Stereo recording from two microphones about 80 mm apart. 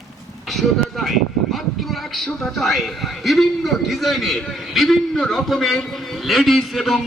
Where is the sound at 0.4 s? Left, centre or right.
Centre.